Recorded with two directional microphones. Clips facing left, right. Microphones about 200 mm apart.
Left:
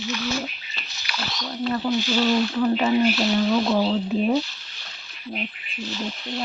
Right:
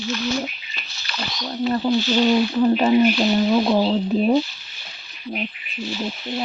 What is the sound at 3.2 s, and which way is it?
Speech, 20° right (ahead or behind).